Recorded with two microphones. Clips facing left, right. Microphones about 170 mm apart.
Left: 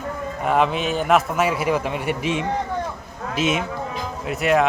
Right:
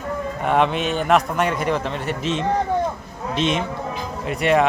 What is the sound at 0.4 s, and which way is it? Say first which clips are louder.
A man's voice: even; centre (ahead or behind).